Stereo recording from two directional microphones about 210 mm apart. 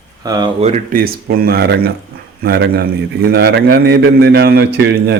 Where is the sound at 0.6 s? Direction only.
30° right (ahead or behind).